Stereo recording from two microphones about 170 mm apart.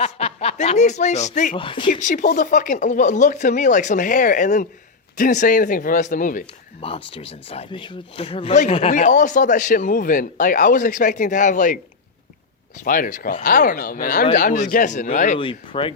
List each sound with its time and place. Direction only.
0.0 s speech: 40° left (ahead or behind)
1.5 s speech: 30° left (ahead or behind)
1.9 s speech: 45° left (ahead or behind)
6.8 s speech: 35° left (ahead or behind); by 11.8 s 50° left (ahead or behind)
12.8 s speech: 50° left (ahead or behind)
15.4 s speech: 30° left (ahead or behind)